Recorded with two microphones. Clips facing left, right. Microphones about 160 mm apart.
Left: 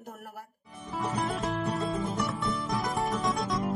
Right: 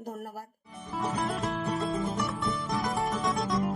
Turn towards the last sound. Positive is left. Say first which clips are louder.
# right 1 dB
turn(degrees=0)  # may be behind; listen again after turning